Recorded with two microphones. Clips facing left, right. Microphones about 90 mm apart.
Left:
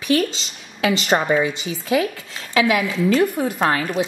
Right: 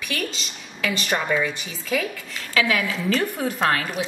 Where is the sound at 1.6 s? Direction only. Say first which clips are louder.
Left 6 dB; 20° left (ahead or behind).